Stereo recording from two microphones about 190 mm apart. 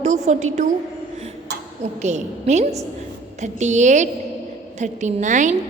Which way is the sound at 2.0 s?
35° right (ahead or behind).